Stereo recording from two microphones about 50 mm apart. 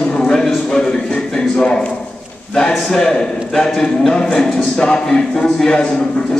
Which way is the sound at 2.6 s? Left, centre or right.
Centre.